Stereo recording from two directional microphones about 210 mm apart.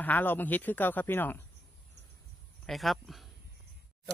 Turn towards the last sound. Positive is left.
turn(degrees=0)  # may be behind; listen again after turning